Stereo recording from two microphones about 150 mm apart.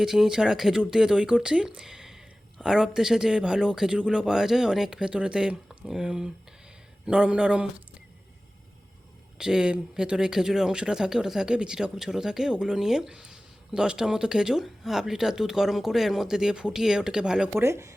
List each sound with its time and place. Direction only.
0.0 s a man's voice: 5° right (ahead or behind)
9.4 s speech: 5° right (ahead or behind)
17.6 s speech: 20° right (ahead or behind)